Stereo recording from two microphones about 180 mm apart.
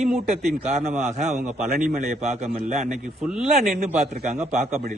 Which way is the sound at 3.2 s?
5° right (ahead or behind).